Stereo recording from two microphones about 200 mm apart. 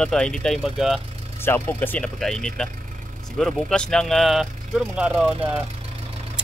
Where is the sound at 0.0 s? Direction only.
5° left (ahead or behind).